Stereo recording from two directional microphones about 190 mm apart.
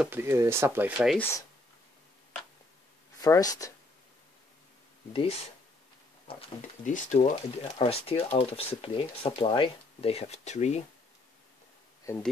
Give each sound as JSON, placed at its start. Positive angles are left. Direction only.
{"t": 0.0, "sound": "speech", "side_deg": -10}
{"t": 1.1, "sound": "speech", "side_deg": 10}
{"t": 3.2, "sound": "speech", "side_deg": 20}
{"t": 5.1, "sound": "speech", "side_deg": 30}
{"t": 6.9, "sound": "speech", "side_deg": 40}